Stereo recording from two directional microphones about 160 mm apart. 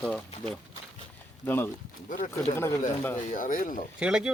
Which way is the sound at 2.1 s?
55° left (ahead or behind).